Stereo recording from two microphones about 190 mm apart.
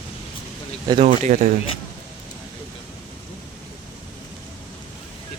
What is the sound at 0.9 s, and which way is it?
Speech, 30° right (ahead or behind).